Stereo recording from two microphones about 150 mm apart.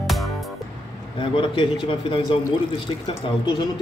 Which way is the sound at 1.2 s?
35° left (ahead or behind).